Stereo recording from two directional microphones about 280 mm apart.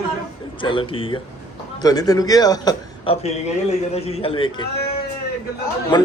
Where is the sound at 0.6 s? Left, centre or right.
Centre.